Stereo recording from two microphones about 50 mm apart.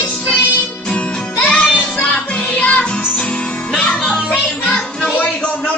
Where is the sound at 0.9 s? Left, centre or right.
Centre.